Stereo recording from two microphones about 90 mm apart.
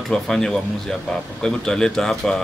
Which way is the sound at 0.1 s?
5° left (ahead or behind).